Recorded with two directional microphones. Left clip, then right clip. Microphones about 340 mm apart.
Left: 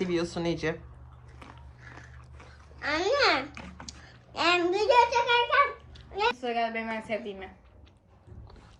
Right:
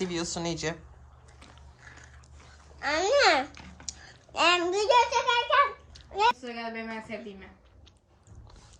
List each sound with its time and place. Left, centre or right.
0.0 s a woman's voice: centre
2.7 s babbling: right
3.8 s a sound: right
6.4 s a woman's voice: centre